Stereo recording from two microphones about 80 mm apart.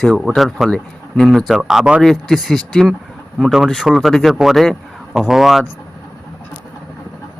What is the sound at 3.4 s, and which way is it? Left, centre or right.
A man's voice, centre.